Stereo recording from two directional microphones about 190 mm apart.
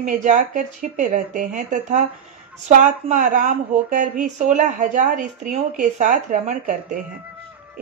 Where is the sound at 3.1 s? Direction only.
45° right (ahead or behind).